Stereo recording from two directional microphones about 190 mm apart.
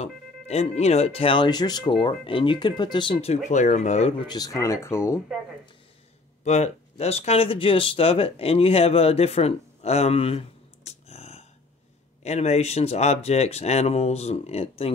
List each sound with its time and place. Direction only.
0.0 s speech: 30° left (ahead or behind)
4.3 s speech: 20° left (ahead or behind)
6.4 s speech: 35° left (ahead or behind)